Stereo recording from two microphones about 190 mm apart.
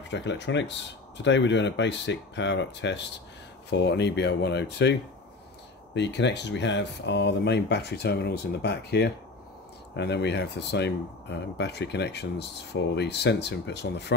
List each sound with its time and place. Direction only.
0.1 s speech: 70° left (ahead or behind)
5.9 s speech: 70° left (ahead or behind)